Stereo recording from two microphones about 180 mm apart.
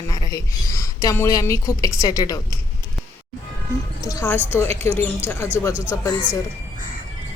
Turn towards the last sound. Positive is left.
turn(degrees=15)  # may be behind; listen again after turning